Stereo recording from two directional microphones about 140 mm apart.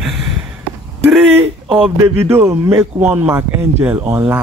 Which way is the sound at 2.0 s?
15° right (ahead or behind).